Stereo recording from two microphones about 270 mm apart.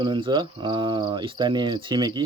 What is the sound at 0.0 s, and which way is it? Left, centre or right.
Speech, centre.